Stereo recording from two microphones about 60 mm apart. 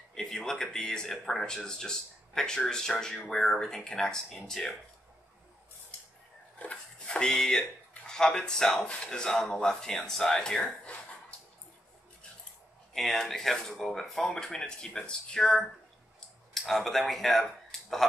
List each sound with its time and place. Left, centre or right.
0.1 s speech: centre
6.6 s speech: centre
10.6 s a sound: centre
12.9 s speech: centre